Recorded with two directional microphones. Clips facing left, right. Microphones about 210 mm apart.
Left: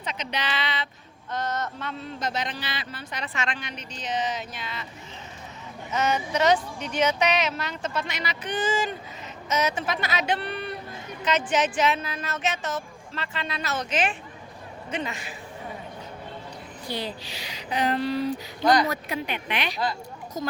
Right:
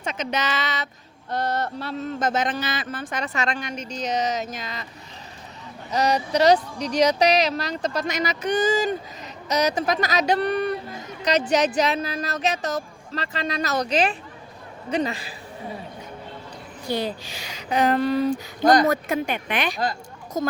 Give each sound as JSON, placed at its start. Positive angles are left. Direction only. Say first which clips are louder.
{"t": 0.0, "sound": "a woman's voice", "louder": "right 5 dB", "side_deg": -45}
{"t": 2.1, "sound": "a woman's voice", "louder": "right 7 dB", "side_deg": -50}
{"t": 5.9, "sound": "speech", "louder": "right 4 dB", "side_deg": -35}
{"t": 16.9, "sound": "a woman's voice", "louder": "right 6 dB", "side_deg": -45}